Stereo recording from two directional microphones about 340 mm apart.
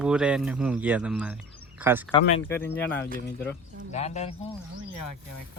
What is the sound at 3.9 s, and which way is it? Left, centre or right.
Speech, centre.